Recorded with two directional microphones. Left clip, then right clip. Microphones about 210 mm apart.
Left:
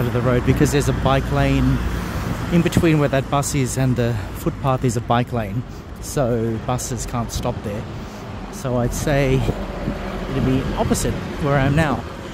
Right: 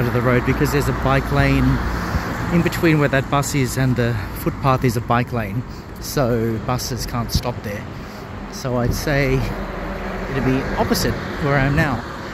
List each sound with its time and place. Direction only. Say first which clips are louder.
0.0 s speech: right 2 dB; 5° left (ahead or behind)
0.5 s speech: left 1 dB; 15° left (ahead or behind)
8.6 s speech: even; 5° left (ahead or behind)
10.3 s speech: right 1 dB; 45° left (ahead or behind)
11.4 s speech: even; 10° left (ahead or behind)